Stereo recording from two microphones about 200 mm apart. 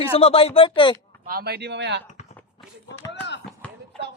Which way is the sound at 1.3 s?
50° right (ahead or behind).